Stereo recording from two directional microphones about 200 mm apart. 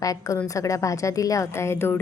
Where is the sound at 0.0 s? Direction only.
15° left (ahead or behind).